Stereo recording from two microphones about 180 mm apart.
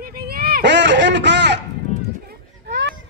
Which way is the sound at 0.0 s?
55° right (ahead or behind).